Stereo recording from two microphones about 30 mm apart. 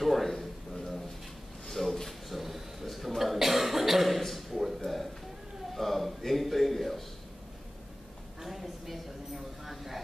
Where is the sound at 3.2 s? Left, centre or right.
Centre.